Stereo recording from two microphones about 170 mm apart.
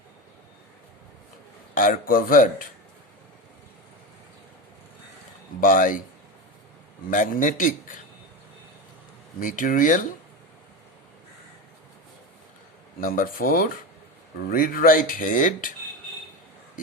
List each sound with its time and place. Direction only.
1.7 s speech: 50° left (ahead or behind)
5.5 s speech: 50° left (ahead or behind)
7.1 s speech: 50° left (ahead or behind)
9.4 s speech: 50° left (ahead or behind)
13.0 s speech: 55° left (ahead or behind)